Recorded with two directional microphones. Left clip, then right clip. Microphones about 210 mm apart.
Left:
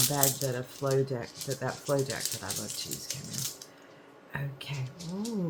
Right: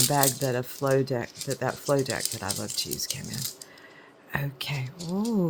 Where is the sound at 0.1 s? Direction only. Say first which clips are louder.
Right 5 dB; 55° right (ahead or behind).